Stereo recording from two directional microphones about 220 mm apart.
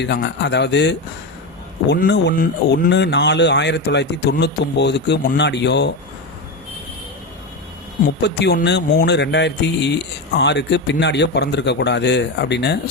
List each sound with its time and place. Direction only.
0.0 s speech: 50° left (ahead or behind)
8.2 s speech: 50° left (ahead or behind)